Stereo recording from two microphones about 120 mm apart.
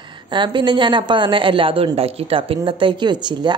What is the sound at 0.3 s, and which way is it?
Speech, 40° right (ahead or behind).